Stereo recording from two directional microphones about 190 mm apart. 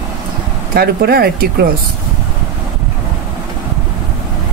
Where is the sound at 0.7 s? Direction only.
55° right (ahead or behind).